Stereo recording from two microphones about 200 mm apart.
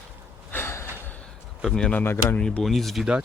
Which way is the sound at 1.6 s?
5° left (ahead or behind).